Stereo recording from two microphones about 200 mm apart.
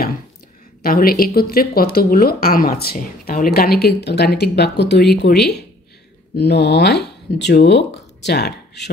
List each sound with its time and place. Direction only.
0.8 s speech: 45° left (ahead or behind)